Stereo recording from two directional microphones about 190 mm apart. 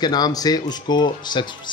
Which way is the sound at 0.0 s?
20° left (ahead or behind).